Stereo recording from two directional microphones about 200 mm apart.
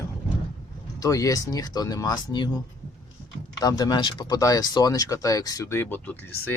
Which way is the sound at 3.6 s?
20° left (ahead or behind).